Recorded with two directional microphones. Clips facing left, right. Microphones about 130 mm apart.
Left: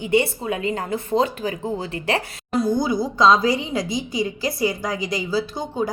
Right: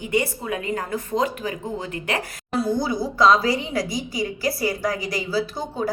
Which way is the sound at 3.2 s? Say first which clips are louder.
Left 1 dB; 20° left (ahead or behind).